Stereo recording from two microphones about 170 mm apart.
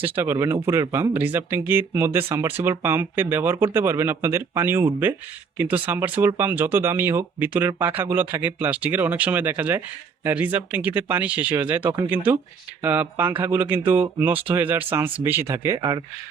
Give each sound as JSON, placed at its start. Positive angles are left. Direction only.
{"t": 0.0, "sound": "speech", "side_deg": -15}